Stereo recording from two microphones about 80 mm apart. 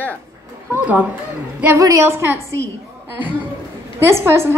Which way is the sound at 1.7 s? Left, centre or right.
Right.